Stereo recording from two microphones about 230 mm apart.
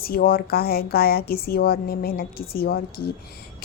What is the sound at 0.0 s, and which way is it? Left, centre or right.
A woman's voice, left.